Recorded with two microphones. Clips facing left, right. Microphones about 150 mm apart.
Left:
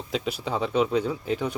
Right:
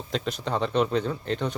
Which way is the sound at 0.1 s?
10° left (ahead or behind).